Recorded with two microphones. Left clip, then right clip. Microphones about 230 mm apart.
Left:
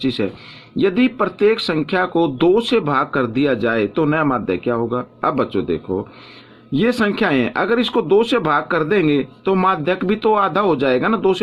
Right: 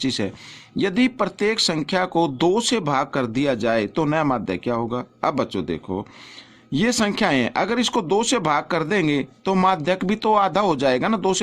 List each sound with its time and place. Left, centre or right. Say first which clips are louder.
0.0 s speech: left 4 dB; right